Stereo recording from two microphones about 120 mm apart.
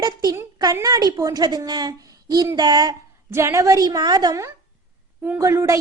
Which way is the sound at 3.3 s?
20° right (ahead or behind).